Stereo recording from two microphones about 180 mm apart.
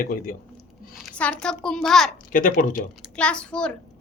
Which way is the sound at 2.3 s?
50° left (ahead or behind).